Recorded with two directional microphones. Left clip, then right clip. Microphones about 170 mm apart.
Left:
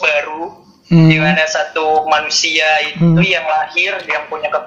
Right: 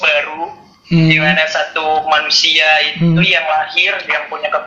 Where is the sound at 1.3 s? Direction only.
20° left (ahead or behind).